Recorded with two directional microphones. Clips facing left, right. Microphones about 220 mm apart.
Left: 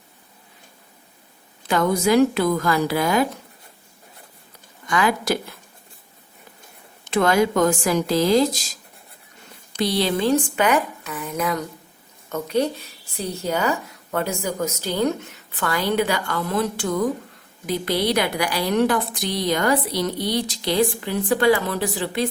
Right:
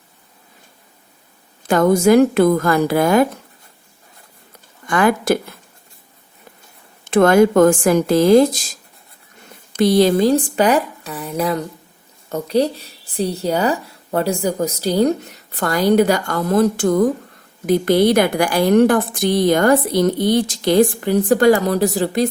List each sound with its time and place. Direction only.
1.6 s a woman's voice: 45° right (ahead or behind)
4.9 s a woman's voice: 50° right (ahead or behind)
7.0 s a woman's voice: 50° right (ahead or behind)
9.7 s a woman's voice: 50° right (ahead or behind)